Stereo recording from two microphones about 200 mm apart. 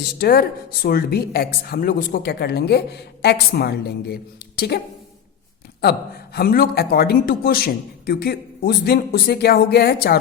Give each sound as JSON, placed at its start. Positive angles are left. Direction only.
{"t": 0.0, "sound": "speech", "side_deg": 50}
{"t": 5.8, "sound": "speech", "side_deg": 50}